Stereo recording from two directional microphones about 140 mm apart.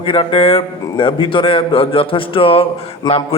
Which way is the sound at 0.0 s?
35° left (ahead or behind).